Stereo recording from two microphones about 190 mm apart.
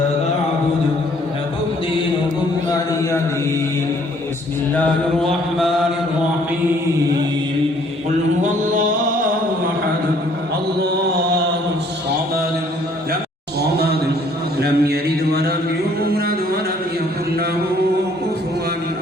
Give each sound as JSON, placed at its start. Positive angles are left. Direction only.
{"t": 2.6, "sound": "music", "side_deg": 20}
{"t": 8.4, "sound": "mantra", "side_deg": -40}
{"t": 13.6, "sound": "a sound", "side_deg": -55}
{"t": 16.1, "sound": "music", "side_deg": -50}